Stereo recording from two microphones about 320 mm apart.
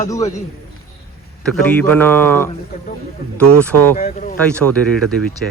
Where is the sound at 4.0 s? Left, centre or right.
Left.